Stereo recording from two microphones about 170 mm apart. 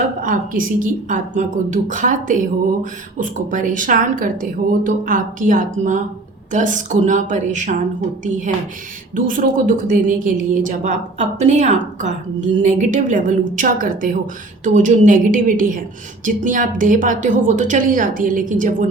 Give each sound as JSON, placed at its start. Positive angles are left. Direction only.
{"t": 0.2, "sound": "a woman's voice", "side_deg": -50}
{"t": 9.1, "sound": "a woman's voice", "side_deg": -55}